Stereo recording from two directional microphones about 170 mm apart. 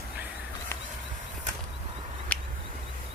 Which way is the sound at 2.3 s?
10° left (ahead or behind).